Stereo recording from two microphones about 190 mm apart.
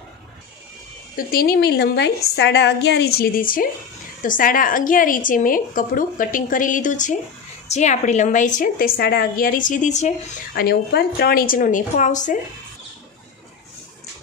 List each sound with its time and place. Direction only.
1.1 s a woman's voice: 50° left (ahead or behind)
10.5 s a woman's voice: 55° left (ahead or behind); by 12.4 s 40° left (ahead or behind)